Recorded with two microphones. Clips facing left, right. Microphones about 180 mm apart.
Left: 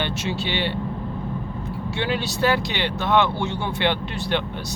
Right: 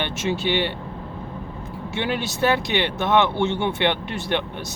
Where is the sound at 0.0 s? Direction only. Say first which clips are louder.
Right 2 dB; 20° right (ahead or behind).